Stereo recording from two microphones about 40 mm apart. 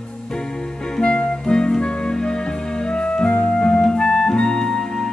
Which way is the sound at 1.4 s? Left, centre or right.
Centre.